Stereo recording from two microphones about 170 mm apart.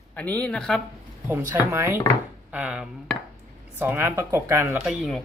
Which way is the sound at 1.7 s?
15° right (ahead or behind).